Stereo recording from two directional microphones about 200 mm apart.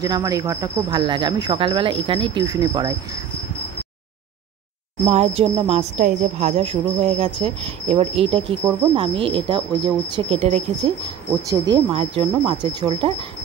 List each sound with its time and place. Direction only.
0.0 s speech: 20° right (ahead or behind)
5.0 s speech: 30° right (ahead or behind)